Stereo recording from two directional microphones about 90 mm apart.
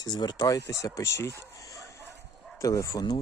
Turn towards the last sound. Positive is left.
turn(degrees=45)  # may be behind; listen again after turning